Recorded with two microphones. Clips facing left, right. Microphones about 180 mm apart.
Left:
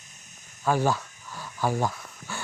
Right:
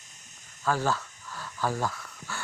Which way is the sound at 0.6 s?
15° left (ahead or behind).